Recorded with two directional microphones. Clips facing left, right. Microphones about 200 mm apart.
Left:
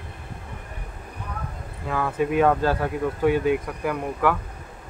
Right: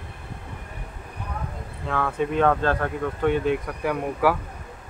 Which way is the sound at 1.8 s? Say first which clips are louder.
Left 1 dB; 5° left (ahead or behind).